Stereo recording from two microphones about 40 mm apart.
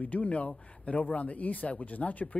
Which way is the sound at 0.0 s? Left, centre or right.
Left.